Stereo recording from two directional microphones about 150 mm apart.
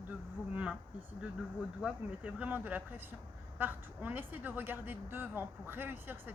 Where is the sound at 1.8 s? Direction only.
10° right (ahead or behind).